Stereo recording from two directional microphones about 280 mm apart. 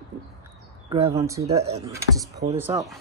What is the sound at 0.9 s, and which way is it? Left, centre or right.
Speech, centre.